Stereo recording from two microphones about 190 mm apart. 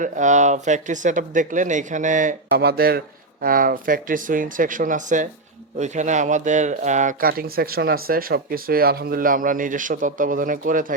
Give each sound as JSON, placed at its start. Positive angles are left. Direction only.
{"t": 0.0, "sound": "speech", "side_deg": -40}
{"t": 2.5, "sound": "speech", "side_deg": -55}